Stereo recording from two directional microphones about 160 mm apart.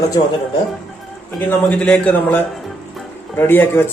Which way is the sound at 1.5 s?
5° left (ahead or behind).